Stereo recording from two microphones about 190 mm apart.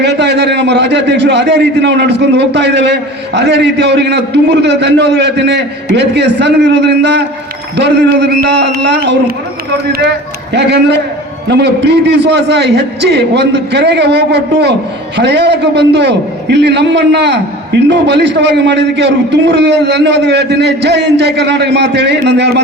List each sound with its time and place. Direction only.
0.0 s a man's voice: 65° right (ahead or behind)
10.5 s a man's voice: 65° right (ahead or behind)